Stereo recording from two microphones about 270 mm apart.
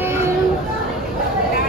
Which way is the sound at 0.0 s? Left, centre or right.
Centre.